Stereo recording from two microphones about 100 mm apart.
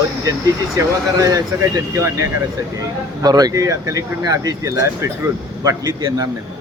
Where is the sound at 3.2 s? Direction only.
40° right (ahead or behind).